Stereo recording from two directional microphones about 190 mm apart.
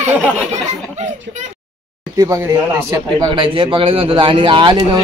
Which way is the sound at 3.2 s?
25° right (ahead or behind).